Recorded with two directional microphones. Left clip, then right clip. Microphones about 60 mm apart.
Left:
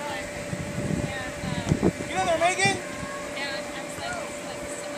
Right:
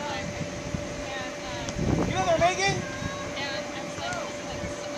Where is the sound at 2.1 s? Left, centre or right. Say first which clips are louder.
Right 1 dB; left.